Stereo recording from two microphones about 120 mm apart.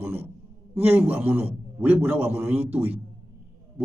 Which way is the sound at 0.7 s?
15° right (ahead or behind).